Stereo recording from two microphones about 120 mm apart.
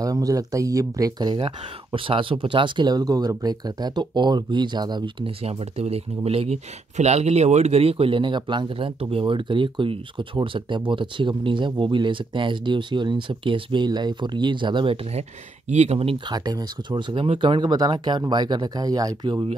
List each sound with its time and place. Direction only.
0.0 s speech: 30° right (ahead or behind)
1.4 s speech: 45° right (ahead or behind)
15.7 s speech: 65° right (ahead or behind)
16.3 s speech: 35° right (ahead or behind)